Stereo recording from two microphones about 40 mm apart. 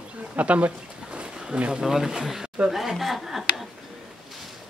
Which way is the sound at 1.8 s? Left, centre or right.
Centre.